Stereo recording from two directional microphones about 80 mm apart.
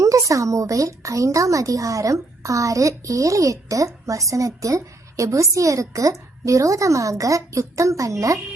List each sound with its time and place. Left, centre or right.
0.0 s a woman's voice: right